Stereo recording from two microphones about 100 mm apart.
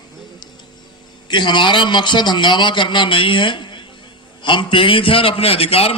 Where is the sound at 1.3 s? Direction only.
50° left (ahead or behind).